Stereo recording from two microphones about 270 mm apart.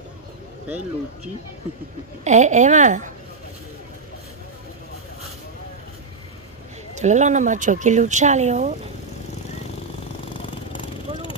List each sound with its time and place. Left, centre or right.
2.2 s speech: right
7.0 s speech: right